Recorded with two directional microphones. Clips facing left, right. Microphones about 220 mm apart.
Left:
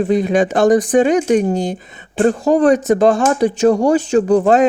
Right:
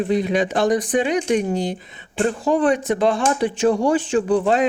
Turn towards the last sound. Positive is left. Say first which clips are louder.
# left 6 dB
turn(degrees=45)  # may be behind; listen again after turning